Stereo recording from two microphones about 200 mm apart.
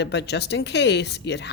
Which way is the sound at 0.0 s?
55° left (ahead or behind).